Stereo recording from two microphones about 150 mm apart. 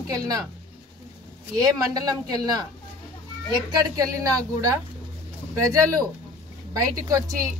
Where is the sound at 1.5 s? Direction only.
25° right (ahead or behind).